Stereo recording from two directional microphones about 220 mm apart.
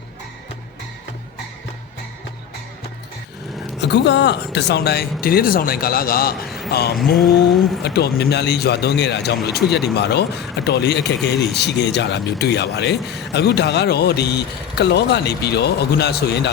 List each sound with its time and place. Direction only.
3.8 s speech: 50° left (ahead or behind)
6.9 s speech: centre (ahead or behind)
7.9 s speech: 50° left (ahead or behind)